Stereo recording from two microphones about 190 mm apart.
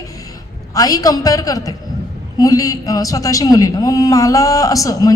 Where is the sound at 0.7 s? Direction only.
20° left (ahead or behind).